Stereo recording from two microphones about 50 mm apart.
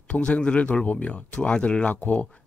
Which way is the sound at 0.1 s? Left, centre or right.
Left.